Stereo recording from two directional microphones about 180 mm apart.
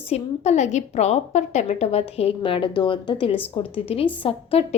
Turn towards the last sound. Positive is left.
turn(degrees=35)  # may be behind; listen again after turning